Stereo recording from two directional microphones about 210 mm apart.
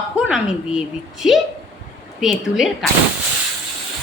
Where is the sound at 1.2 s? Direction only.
Centre (ahead or behind).